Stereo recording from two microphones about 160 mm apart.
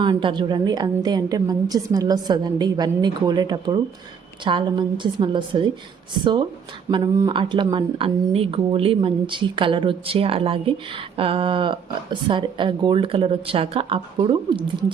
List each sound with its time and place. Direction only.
0.0 s a woman's voice: 30° right (ahead or behind)
7.2 s speech: 30° right (ahead or behind)